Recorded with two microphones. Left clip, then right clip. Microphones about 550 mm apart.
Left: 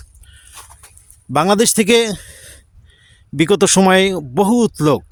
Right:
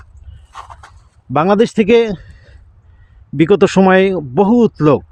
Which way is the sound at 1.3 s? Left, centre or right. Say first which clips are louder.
Right 2 dB; left.